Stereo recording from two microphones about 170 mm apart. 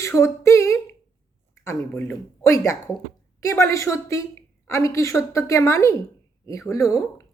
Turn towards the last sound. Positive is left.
turn(degrees=20)  # may be behind; listen again after turning